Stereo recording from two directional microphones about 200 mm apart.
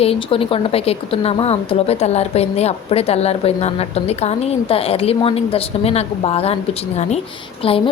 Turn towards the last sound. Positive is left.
turn(degrees=25)  # may be behind; listen again after turning